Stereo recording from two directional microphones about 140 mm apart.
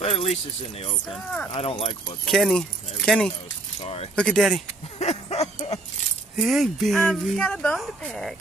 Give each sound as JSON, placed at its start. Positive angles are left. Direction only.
{"t": 0.0, "sound": "speech", "side_deg": 50}
{"t": 1.1, "sound": "speech", "side_deg": 5}
{"t": 1.5, "sound": "speech", "side_deg": 45}
{"t": 2.2, "sound": "speech", "side_deg": 0}
{"t": 3.8, "sound": "speech", "side_deg": 45}
{"t": 4.1, "sound": "speech", "side_deg": 5}
{"t": 4.9, "sound": "a sound", "side_deg": 50}
{"t": 6.3, "sound": "speech", "side_deg": 0}